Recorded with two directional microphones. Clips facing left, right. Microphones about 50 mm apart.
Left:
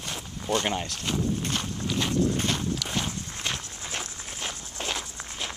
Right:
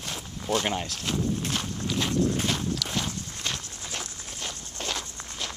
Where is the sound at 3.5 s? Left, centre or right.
Left.